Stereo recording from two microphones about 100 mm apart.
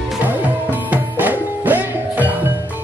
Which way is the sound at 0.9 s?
20° right (ahead or behind).